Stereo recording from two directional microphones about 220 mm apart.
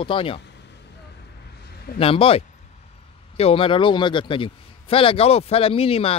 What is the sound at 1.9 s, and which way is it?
A man's voice, 25° left (ahead or behind).